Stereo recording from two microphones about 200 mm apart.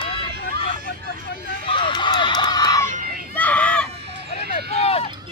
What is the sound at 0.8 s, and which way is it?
Vehicle, 55° left (ahead or behind).